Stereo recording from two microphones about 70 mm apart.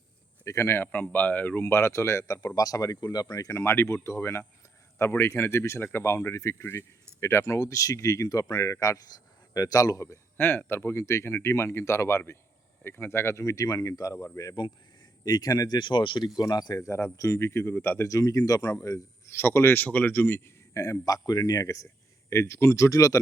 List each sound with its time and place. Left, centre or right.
0.4 s speech: left
0.9 s speech: left
2.6 s speech: left
9.5 s a man's voice: left
10.3 s speech: left
15.2 s speech: left
16.4 s speech: left
16.8 s speech: left
18.0 s speech: left
19.4 s speech: left
20.7 s a man's voice: left
22.3 s speech: left